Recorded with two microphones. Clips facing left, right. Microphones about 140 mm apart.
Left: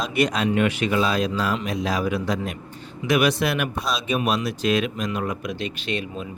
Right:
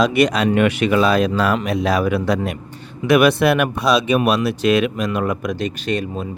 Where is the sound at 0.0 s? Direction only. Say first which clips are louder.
Right 6 dB; 75° right (ahead or behind).